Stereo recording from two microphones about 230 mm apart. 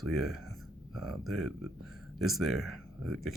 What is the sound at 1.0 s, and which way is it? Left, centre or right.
Speech, right.